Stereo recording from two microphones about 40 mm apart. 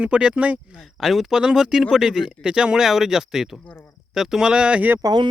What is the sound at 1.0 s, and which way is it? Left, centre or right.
Speech, centre.